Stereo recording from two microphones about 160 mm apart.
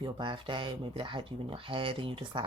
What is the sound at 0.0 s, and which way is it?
Speech, 30° right (ahead or behind).